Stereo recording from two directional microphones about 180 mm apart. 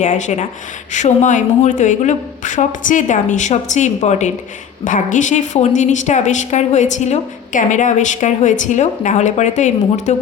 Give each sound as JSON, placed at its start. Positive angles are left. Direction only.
{"t": 0.0, "sound": "a woman's voice", "side_deg": 45}